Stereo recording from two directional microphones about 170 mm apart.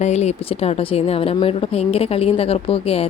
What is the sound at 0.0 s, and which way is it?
A woman's voice, 40° left (ahead or behind).